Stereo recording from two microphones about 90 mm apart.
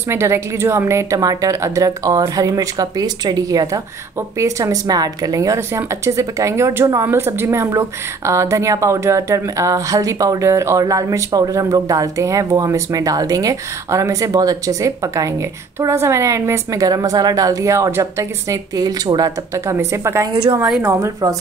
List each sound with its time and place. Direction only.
0.1 s speech: 30° right (ahead or behind)
1.2 s a woman's voice: 40° right (ahead or behind)